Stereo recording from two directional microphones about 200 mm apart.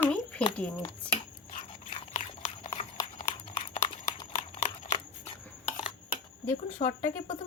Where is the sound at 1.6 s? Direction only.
35° left (ahead or behind).